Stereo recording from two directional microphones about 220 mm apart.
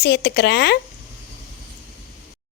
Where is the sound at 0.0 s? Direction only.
50° left (ahead or behind).